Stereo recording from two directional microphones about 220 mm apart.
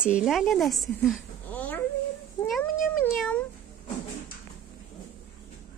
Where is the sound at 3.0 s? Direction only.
5° left (ahead or behind).